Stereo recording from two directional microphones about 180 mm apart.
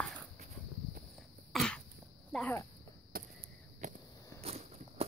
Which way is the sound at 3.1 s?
55° right (ahead or behind).